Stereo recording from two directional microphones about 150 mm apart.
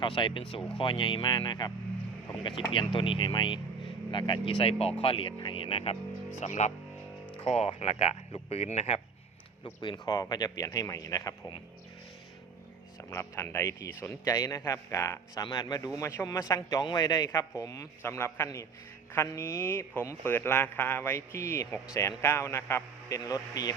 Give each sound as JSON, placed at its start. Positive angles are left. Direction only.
{"t": 0.0, "sound": "speech", "side_deg": 35}
{"t": 6.4, "sound": "speech", "side_deg": 50}
{"t": 9.6, "sound": "speech", "side_deg": 30}
{"t": 13.0, "sound": "speech", "side_deg": 20}